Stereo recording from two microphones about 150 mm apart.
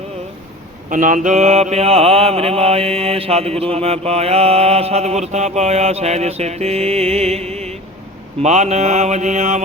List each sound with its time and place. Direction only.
0.9 s mantra: 60° right (ahead or behind)